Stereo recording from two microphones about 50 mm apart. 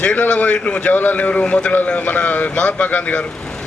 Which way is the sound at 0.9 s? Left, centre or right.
Left.